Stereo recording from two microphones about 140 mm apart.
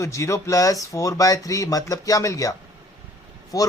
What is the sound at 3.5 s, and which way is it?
Speech, 25° left (ahead or behind).